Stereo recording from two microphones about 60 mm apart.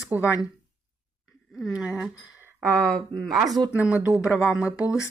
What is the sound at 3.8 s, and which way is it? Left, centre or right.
Speech, centre.